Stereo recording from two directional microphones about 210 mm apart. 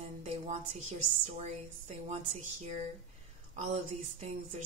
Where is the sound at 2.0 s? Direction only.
35° right (ahead or behind).